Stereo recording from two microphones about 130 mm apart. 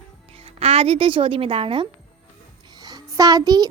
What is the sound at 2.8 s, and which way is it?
Speech, 30° right (ahead or behind).